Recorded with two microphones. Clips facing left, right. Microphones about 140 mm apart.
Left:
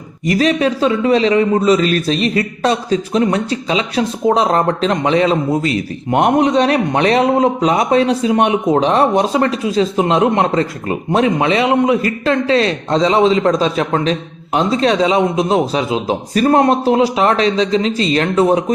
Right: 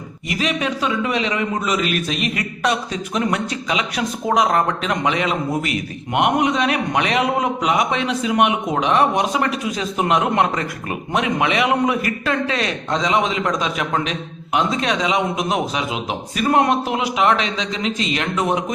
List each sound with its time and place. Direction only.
0.3 s a man's voice: 40° left (ahead or behind)